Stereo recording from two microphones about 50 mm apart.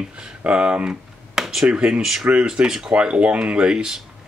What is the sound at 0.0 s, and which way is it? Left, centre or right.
Speech, right.